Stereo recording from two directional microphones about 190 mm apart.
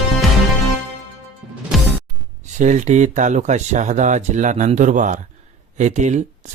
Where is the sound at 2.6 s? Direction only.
40° right (ahead or behind).